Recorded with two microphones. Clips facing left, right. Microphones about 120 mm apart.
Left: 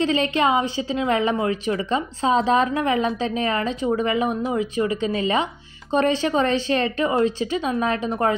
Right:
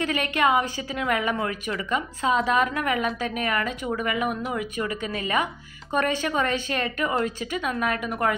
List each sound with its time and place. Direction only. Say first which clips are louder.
0.0 s a woman's voice: left 4 dB; 25° left (ahead or behind)